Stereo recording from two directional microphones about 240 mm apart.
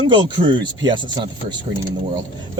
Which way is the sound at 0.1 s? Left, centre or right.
Centre.